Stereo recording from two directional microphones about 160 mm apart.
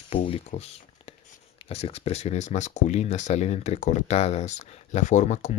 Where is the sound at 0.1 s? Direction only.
45° left (ahead or behind).